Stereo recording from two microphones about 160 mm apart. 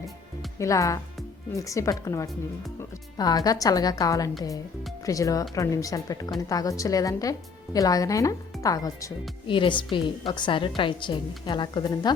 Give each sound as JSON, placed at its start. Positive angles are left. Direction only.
{"t": 0.6, "sound": "a woman's voice", "side_deg": 20}